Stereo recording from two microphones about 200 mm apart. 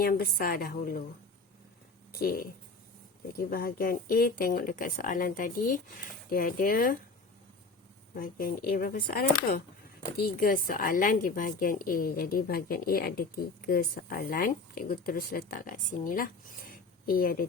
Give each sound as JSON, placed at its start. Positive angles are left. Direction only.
{"t": 0.0, "sound": "a woman's voice", "side_deg": 45}
{"t": 2.1, "sound": "a woman's voice", "side_deg": 50}
{"t": 8.1, "sound": "a woman's voice", "side_deg": 45}